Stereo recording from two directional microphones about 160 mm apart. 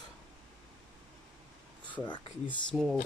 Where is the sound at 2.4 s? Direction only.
Centre (ahead or behind).